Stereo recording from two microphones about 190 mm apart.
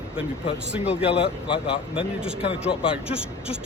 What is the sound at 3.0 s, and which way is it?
Speech, 5° right (ahead or behind).